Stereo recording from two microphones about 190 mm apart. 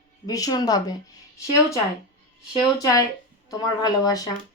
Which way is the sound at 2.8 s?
20° left (ahead or behind).